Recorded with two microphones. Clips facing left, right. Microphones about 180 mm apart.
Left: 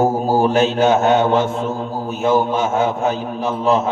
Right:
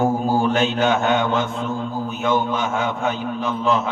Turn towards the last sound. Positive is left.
turn(degrees=40)  # may be behind; listen again after turning